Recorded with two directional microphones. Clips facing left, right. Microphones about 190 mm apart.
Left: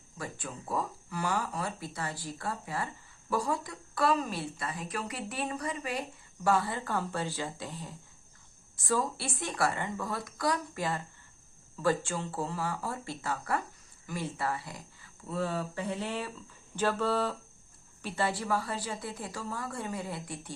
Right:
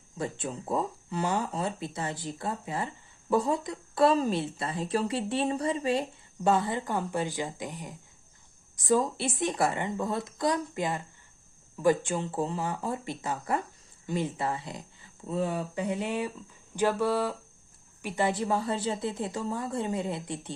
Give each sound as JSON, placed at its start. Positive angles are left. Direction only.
{"t": 0.2, "sound": "speech", "side_deg": -25}